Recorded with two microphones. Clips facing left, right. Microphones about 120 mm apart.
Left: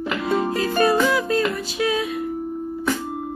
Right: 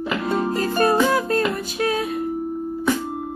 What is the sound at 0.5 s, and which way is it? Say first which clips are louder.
Music: right 1 dB; 45° right (ahead or behind).